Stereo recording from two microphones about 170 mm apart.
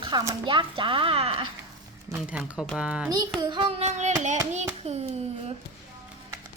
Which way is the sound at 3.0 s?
20° right (ahead or behind).